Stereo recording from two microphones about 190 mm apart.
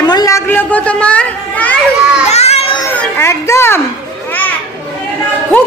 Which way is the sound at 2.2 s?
35° left (ahead or behind).